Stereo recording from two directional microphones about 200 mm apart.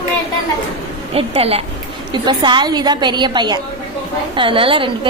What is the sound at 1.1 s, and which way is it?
A woman's voice, 30° right (ahead or behind).